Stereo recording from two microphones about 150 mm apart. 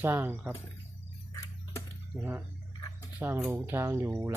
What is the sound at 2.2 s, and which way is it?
Speech, 15° right (ahead or behind).